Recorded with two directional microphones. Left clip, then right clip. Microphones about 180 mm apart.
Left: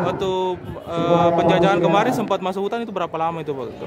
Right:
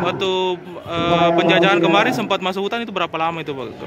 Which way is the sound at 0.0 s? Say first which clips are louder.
Right 2 dB; 5° left (ahead or behind).